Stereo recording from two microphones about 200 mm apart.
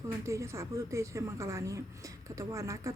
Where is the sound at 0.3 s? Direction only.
15° right (ahead or behind).